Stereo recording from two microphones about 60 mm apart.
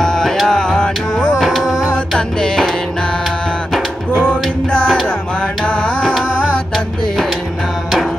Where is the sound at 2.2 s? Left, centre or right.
Centre.